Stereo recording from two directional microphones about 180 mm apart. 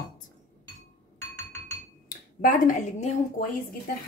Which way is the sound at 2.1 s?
50° left (ahead or behind).